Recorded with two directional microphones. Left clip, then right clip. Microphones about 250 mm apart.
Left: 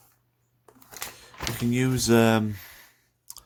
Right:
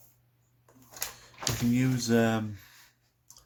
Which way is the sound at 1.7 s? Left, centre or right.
Left.